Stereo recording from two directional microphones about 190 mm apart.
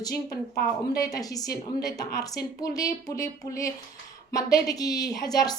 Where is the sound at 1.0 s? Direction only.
20° left (ahead or behind).